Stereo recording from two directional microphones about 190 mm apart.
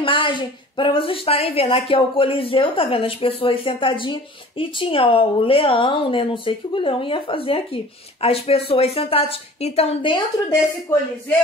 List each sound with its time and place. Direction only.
0.0 s a woman's voice: 25° left (ahead or behind)